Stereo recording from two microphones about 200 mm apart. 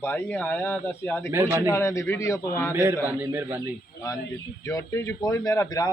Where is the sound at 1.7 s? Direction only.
15° left (ahead or behind).